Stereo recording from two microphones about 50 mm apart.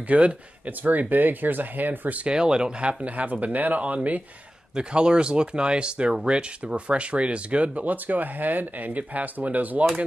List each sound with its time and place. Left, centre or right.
0.0 s speech: right
2.2 s speech: centre
4.7 s speech: centre